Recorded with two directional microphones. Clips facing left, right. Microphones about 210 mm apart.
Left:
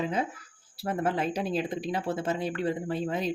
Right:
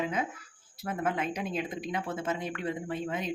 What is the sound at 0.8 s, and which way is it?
Speech, 30° left (ahead or behind).